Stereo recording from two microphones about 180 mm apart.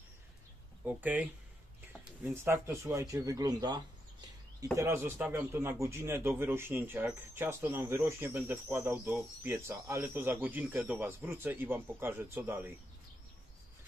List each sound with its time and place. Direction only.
0.8 s a man's voice: 10° right (ahead or behind)